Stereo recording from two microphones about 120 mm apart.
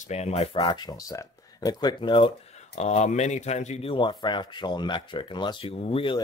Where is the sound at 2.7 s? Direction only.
65° left (ahead or behind).